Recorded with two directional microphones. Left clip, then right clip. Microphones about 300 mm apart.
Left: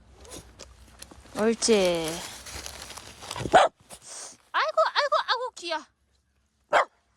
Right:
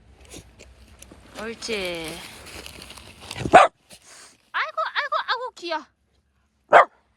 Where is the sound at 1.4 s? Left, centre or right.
Left.